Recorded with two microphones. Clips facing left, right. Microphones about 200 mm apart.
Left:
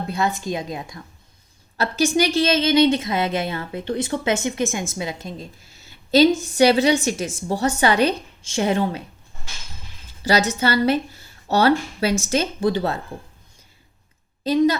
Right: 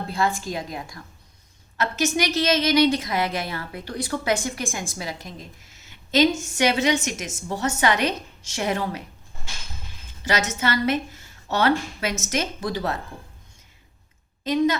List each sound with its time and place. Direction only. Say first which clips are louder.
0.1 s a woman's voice: left 1 dB; 20° left (ahead or behind)
1.8 s a woman's voice: left 4 dB; 30° left (ahead or behind)
10.2 s speech: left 5 dB; 35° left (ahead or behind)
14.4 s speech: left 3 dB; 35° left (ahead or behind)